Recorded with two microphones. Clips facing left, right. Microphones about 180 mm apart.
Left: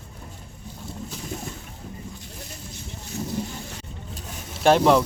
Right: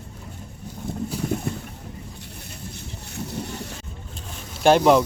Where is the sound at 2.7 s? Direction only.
65° right (ahead or behind).